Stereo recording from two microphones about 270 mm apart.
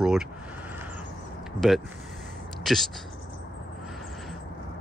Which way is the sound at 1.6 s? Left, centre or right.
Centre.